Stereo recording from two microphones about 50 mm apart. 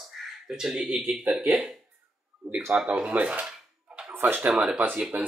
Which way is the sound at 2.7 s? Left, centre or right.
Right.